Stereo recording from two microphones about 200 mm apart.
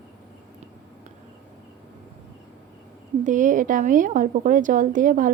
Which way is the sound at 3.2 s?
40° right (ahead or behind).